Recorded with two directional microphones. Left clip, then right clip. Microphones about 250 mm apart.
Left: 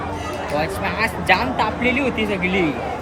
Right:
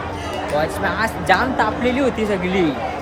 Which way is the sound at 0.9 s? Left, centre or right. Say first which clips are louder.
Even; centre.